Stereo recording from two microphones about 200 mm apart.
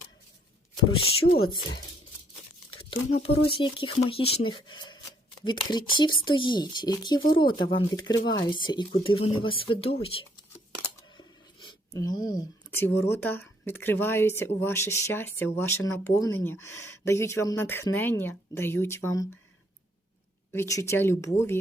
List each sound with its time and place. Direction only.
1.4 s speech: 25° left (ahead or behind)
2.6 s a sound: 25° left (ahead or behind)
3.2 s speech: 25° left (ahead or behind)
20.5 s speech: 15° left (ahead or behind)